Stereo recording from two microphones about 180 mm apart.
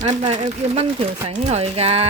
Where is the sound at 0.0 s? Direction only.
35° right (ahead or behind).